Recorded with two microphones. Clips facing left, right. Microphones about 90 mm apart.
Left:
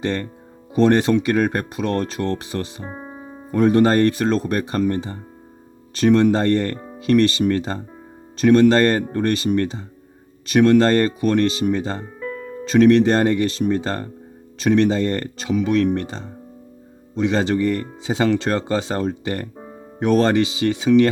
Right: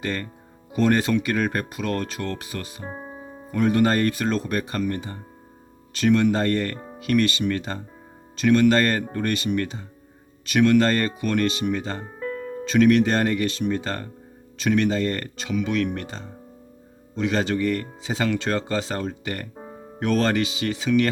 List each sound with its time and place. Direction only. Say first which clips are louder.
0.0 s speech: left 5 dB; 30° left (ahead or behind)